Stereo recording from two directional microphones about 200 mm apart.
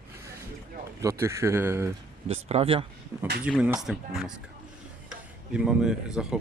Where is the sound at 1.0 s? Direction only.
15° right (ahead or behind).